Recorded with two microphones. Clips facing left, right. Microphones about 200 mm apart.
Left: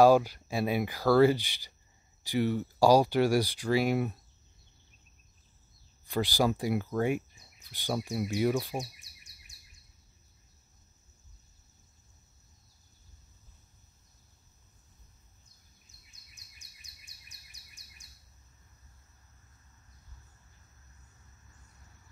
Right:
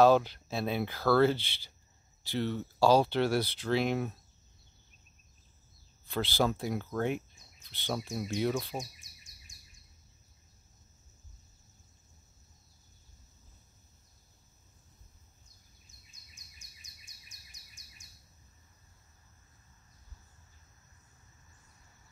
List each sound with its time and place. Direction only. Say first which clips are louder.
0.0 s speech: left 2 dB; 10° left (ahead or behind)
6.0 s speech: left 2 dB; 15° left (ahead or behind)
8.7 s bird: left 3 dB; 65° left (ahead or behind)
16.1 s bird: right 1 dB; 65° left (ahead or behind)